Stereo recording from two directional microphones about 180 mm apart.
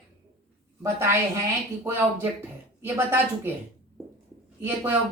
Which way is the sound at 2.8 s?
10° right (ahead or behind).